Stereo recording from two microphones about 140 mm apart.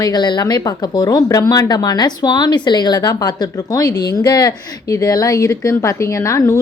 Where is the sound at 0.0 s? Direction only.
30° left (ahead or behind).